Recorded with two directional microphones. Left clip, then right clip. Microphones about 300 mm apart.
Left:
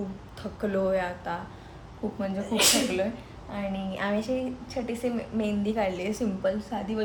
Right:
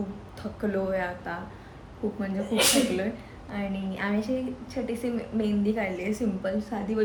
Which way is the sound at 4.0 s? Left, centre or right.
Centre.